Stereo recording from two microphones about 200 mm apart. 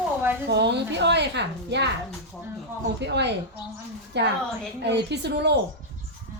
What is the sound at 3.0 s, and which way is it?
A woman's voice, 60° right (ahead or behind).